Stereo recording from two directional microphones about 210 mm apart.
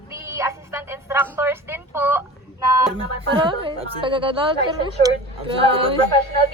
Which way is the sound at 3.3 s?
25° right (ahead or behind).